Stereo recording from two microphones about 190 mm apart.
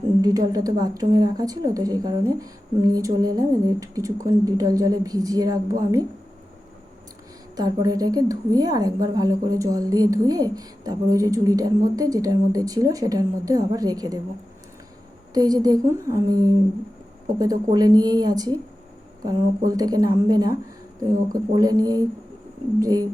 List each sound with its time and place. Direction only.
0.2 s a woman's voice: 20° right (ahead or behind)
7.5 s a woman's voice: 20° right (ahead or behind)
15.3 s a woman's voice: 20° right (ahead or behind)